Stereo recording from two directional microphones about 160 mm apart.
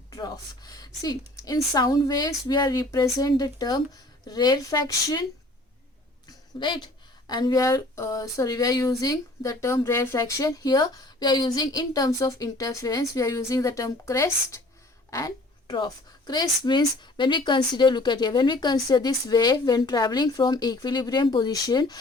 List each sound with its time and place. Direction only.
0.1 s a woman's voice: 25° left (ahead or behind)
6.2 s a woman's voice: 30° left (ahead or behind)